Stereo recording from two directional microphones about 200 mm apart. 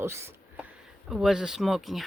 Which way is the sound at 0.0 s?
15° right (ahead or behind).